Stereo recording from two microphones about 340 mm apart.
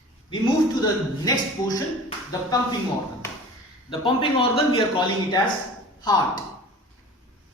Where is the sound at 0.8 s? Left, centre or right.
Centre.